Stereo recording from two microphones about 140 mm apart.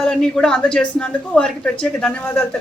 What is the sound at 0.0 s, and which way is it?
Speech, 5° left (ahead or behind).